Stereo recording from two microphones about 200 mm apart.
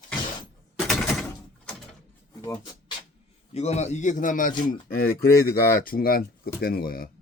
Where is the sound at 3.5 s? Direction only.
35° left (ahead or behind).